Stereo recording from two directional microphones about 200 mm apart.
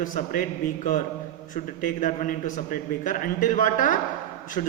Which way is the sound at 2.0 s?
45° left (ahead or behind).